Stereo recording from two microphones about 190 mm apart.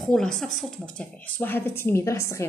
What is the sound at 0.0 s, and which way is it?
Speech, centre (ahead or behind).